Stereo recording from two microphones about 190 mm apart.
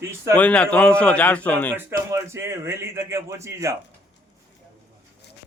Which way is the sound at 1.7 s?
15° right (ahead or behind).